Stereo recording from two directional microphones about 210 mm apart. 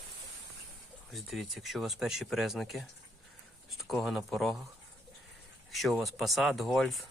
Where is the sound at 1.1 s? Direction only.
Centre (ahead or behind).